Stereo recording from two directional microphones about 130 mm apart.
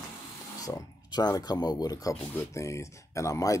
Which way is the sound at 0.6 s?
30° left (ahead or behind).